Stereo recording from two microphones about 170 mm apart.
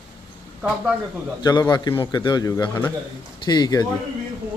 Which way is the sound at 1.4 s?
25° left (ahead or behind).